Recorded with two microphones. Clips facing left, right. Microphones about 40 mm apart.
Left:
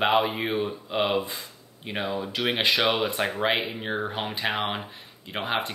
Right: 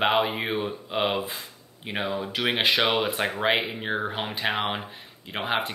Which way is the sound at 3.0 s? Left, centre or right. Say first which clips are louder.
Even; centre.